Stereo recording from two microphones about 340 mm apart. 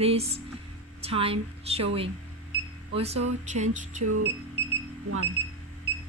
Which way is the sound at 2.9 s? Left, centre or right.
Centre.